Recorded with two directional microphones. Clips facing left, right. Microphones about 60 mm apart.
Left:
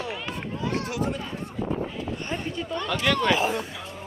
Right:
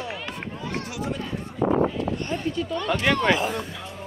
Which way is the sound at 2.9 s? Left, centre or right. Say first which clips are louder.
Right 2 dB; right.